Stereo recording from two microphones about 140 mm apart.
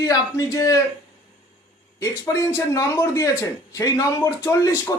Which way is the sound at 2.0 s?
20° left (ahead or behind).